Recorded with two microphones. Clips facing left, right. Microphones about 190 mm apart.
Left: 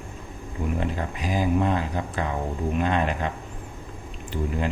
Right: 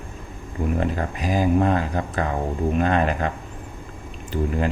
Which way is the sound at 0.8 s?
45° right (ahead or behind).